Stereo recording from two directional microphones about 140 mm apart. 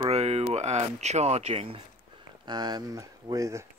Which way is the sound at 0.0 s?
50° right (ahead or behind).